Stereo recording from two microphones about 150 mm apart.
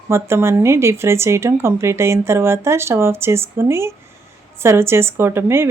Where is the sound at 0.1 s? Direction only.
15° right (ahead or behind).